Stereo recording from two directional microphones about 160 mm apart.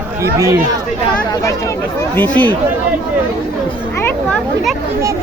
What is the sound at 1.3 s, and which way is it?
Speech, 20° left (ahead or behind).